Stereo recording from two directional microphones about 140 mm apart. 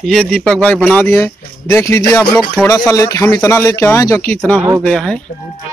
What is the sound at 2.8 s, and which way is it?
Speech, 20° left (ahead or behind).